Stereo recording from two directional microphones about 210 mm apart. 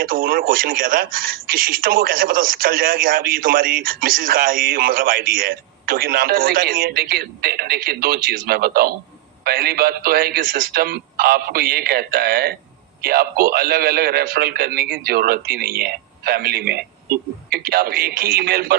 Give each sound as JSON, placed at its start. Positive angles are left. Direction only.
{"t": 0.0, "sound": "speech", "side_deg": -45}